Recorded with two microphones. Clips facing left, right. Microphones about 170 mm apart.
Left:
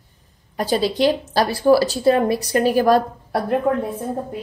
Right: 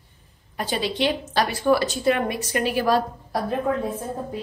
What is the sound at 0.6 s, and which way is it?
A woman's voice, 40° left (ahead or behind).